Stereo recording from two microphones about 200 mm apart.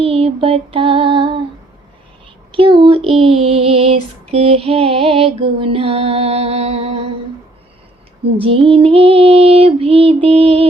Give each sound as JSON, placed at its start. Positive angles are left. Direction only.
{"t": 0.0, "sound": "music", "side_deg": -30}
{"t": 2.5, "sound": "music", "side_deg": -25}
{"t": 8.4, "sound": "music", "side_deg": -25}